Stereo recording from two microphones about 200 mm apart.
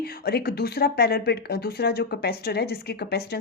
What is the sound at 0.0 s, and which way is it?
Speech, 50° left (ahead or behind).